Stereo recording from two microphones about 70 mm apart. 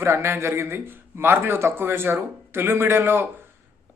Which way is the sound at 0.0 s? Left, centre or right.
Right.